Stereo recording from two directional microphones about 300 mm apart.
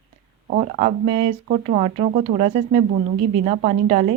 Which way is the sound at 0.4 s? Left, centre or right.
Right.